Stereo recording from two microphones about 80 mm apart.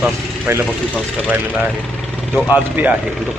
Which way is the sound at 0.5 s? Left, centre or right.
Right.